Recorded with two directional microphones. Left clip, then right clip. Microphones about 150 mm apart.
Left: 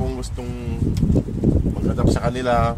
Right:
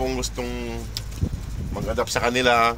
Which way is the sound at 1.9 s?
Centre (ahead or behind).